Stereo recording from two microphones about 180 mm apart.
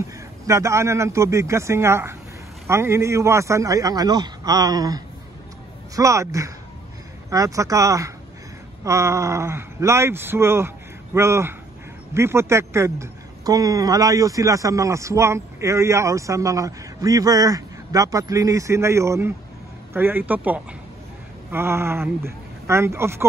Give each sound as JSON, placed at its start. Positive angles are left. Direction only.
{"t": 0.5, "sound": "speech", "side_deg": -15}